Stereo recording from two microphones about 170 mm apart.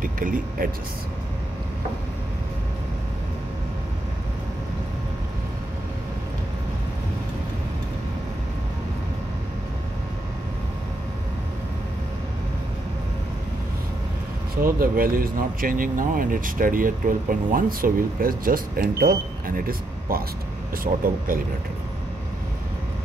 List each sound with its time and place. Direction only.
0.0 s speech: 55° right (ahead or behind)
14.5 s speech: 60° right (ahead or behind)